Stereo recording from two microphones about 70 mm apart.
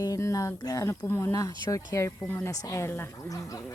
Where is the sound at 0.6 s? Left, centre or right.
Left.